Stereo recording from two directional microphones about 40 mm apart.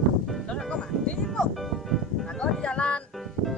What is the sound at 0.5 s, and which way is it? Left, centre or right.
Music, centre.